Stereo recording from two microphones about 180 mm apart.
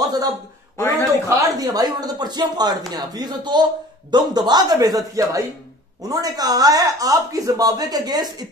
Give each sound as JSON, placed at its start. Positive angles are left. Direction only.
{"t": 0.0, "sound": "speech", "side_deg": -20}
{"t": 0.7, "sound": "a man's voice", "side_deg": 15}
{"t": 1.6, "sound": "speech", "side_deg": -20}